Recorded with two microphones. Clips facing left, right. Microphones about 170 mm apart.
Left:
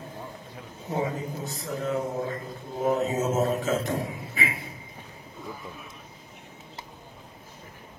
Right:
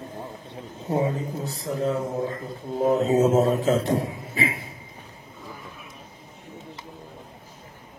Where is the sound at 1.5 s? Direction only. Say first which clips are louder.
Right 6 dB; 30° right (ahead or behind).